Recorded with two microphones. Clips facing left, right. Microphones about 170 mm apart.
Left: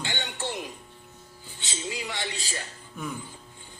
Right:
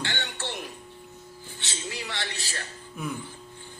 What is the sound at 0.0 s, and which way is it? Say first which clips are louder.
Music: left 1 dB; 15° left (ahead or behind).